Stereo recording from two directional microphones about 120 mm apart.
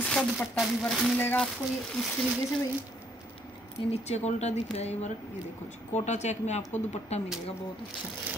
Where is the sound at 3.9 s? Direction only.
65° left (ahead or behind).